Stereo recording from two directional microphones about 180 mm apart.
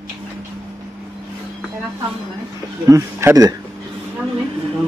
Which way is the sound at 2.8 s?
15° right (ahead or behind).